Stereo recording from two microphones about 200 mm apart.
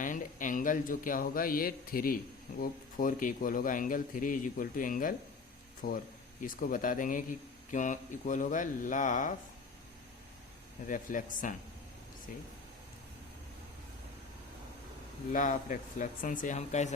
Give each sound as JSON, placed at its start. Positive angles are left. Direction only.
{"t": 0.0, "sound": "a man's voice", "side_deg": 40}
{"t": 10.8, "sound": "a man's voice", "side_deg": 40}
{"t": 15.3, "sound": "a man's voice", "side_deg": 40}